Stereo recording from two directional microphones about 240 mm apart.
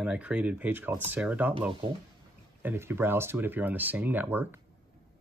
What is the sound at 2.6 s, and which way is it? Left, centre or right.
Speech, centre.